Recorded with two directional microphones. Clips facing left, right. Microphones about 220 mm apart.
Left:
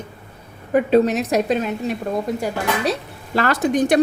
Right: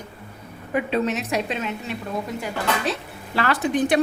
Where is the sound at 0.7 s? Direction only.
40° left (ahead or behind).